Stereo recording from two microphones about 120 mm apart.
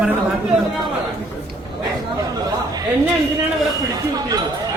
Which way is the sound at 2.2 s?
30° right (ahead or behind).